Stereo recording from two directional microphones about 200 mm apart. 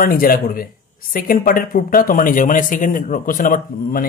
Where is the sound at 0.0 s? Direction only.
45° left (ahead or behind).